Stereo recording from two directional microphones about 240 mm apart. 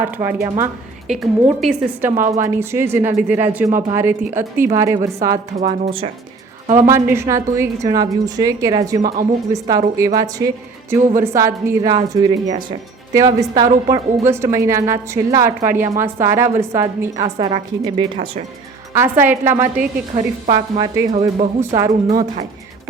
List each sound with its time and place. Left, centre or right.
0.0 s a woman's voice: centre
1.0 s a woman's voice: centre
5.5 s a woman's voice: right
6.8 s a woman's voice: centre
9.0 s speech: right
9.5 s a woman's voice: centre
14.3 s a woman's voice: centre
17.2 s a woman's voice: right
21.1 s a woman's voice: right
21.8 s a woman's voice: centre